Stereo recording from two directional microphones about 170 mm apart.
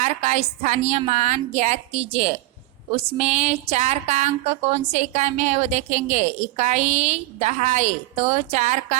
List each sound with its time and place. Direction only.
0.0 s a woman's voice: 45° right (ahead or behind)